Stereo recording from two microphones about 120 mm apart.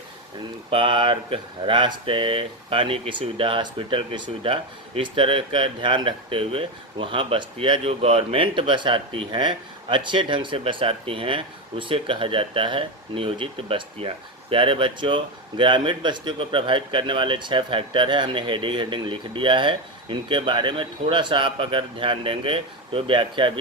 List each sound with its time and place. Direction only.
0.7 s speech: 45° right (ahead or behind)